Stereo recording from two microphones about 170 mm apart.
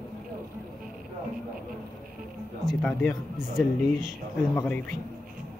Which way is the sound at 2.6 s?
Centre (ahead or behind).